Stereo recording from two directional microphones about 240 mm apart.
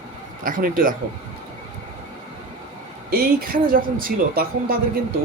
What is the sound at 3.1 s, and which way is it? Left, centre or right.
Speech, right.